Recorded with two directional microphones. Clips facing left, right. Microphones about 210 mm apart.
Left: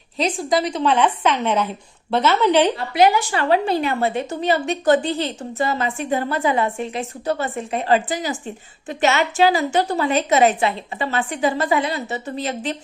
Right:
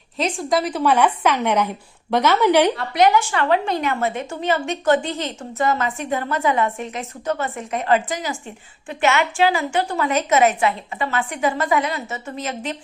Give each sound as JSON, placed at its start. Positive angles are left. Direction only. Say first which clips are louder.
{"t": 0.2, "sound": "a woman's voice", "louder": "left 1 dB", "side_deg": 0}
{"t": 3.2, "sound": "a woman's voice", "louder": "left 1 dB", "side_deg": 35}